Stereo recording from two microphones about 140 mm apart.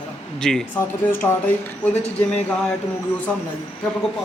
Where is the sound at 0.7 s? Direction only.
15° left (ahead or behind).